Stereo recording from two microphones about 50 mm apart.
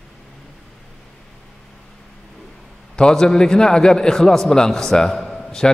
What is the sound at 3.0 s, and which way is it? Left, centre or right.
A man's voice, centre.